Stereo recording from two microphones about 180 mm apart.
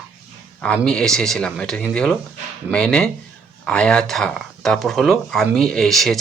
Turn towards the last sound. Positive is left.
turn(degrees=0)  # may be behind; listen again after turning